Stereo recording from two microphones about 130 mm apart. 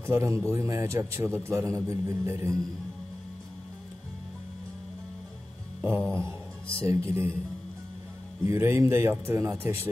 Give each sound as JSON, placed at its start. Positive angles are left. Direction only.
{"t": 0.0, "sound": "a man's voice", "side_deg": -20}
{"t": 5.8, "sound": "music", "side_deg": -15}
{"t": 6.9, "sound": "a man's voice", "side_deg": -20}
{"t": 8.5, "sound": "a man's voice", "side_deg": -20}